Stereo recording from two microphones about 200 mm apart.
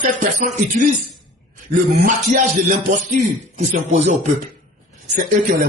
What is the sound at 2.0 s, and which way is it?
Speech, 40° right (ahead or behind).